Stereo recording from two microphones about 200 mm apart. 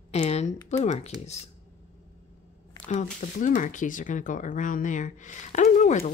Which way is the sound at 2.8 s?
35° left (ahead or behind).